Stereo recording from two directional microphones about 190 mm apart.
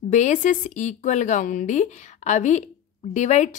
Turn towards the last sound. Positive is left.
turn(degrees=40)  # may be behind; listen again after turning